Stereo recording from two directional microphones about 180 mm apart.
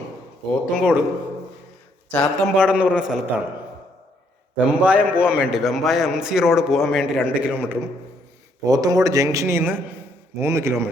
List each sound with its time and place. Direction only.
0.6 s a man's voice: 5° right (ahead or behind)
2.0 s speech: 5° left (ahead or behind)
2.6 s a man's voice: 5° right (ahead or behind)
4.5 s a man's voice: 5° right (ahead or behind)
8.6 s a man's voice: 20° right (ahead or behind)